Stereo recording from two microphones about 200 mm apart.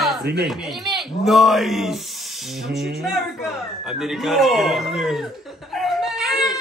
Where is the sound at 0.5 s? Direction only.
Centre (ahead or behind).